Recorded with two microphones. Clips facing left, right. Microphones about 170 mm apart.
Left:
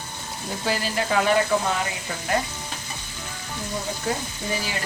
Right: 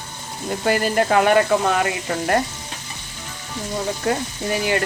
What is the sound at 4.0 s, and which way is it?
Speech, 65° right (ahead or behind).